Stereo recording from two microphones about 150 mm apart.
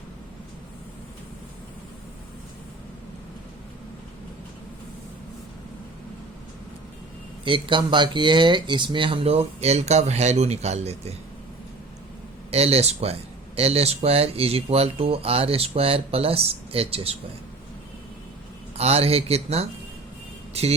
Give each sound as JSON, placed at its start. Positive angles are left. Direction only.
{"t": 7.4, "sound": "speech", "side_deg": -35}
{"t": 12.5, "sound": "speech", "side_deg": -45}
{"t": 18.8, "sound": "speech", "side_deg": -45}